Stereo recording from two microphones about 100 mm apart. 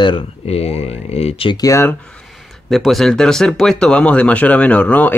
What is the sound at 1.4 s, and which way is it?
Speech, 40° left (ahead or behind).